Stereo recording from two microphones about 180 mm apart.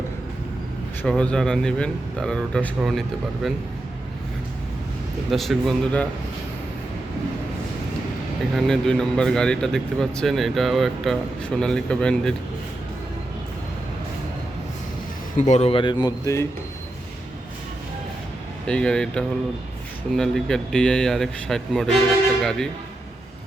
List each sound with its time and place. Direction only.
1.0 s speech: 5° left (ahead or behind)
5.3 s speech: centre (ahead or behind)
8.5 s speech: 5° left (ahead or behind)
15.4 s speech: 40° left (ahead or behind); by 16.5 s 20° left (ahead or behind)
18.6 s speech: 5° left (ahead or behind)